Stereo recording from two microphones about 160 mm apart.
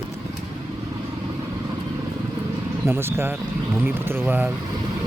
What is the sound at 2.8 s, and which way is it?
Speech, 15° right (ahead or behind).